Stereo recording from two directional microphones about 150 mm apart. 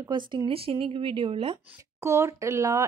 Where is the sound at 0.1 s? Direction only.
30° right (ahead or behind).